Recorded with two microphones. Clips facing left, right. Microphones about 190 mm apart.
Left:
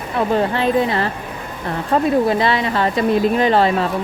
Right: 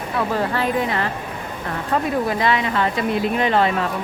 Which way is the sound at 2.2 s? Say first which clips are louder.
Left 3 dB; 30° left (ahead or behind).